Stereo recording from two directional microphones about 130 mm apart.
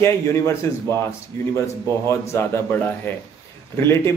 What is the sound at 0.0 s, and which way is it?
Speech, 20° left (ahead or behind).